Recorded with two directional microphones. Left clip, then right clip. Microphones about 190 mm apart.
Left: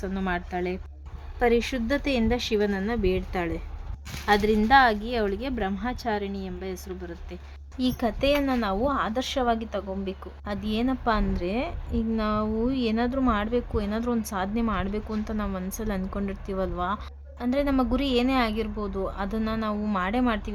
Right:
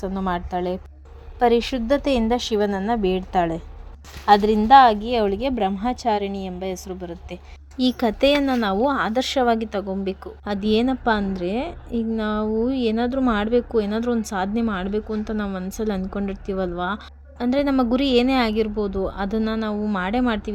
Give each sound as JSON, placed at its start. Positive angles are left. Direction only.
{"t": 0.0, "sound": "a woman's voice", "side_deg": -10}